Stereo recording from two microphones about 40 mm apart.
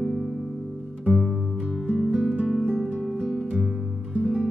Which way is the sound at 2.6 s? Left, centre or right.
Right.